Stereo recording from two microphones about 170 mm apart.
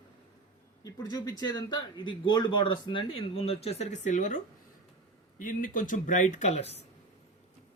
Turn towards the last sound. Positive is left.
turn(degrees=40)  # may be behind; listen again after turning